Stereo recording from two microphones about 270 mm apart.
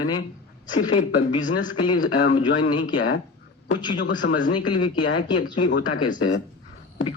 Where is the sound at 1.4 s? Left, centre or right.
Left.